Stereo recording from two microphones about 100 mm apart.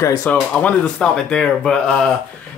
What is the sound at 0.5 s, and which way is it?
Speech, 10° left (ahead or behind).